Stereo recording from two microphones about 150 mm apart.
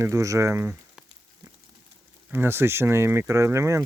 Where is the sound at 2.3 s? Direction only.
15° right (ahead or behind).